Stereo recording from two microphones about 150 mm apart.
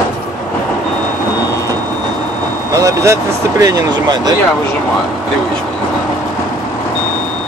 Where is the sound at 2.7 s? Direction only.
20° right (ahead or behind).